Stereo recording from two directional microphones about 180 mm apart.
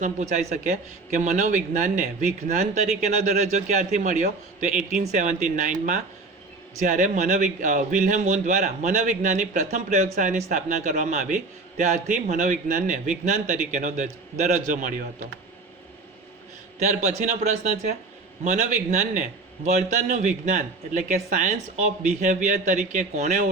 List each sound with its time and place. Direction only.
0.0 s a man's voice: 40° right (ahead or behind)
16.8 s a man's voice: 40° right (ahead or behind)